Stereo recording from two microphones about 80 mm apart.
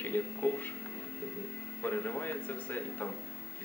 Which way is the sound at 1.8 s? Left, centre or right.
Left.